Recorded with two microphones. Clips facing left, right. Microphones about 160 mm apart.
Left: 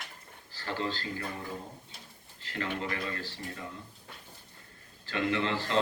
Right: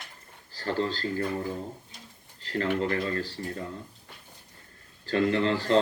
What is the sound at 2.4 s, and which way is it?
Speech, 40° right (ahead or behind).